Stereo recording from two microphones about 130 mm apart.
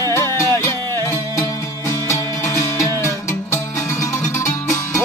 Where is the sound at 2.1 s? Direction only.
25° left (ahead or behind).